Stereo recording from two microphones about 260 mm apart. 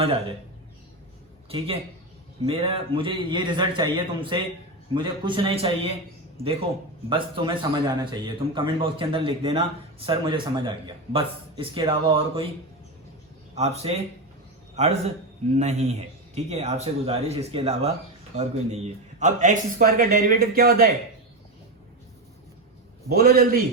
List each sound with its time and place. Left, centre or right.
0.0 s a man's voice: right
1.5 s a man's voice: right
13.6 s a man's voice: right
19.2 s a man's voice: right
23.0 s a man's voice: right